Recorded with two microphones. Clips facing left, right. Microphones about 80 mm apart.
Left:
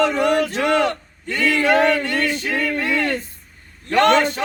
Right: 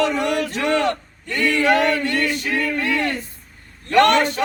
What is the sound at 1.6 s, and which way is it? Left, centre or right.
Chant, left.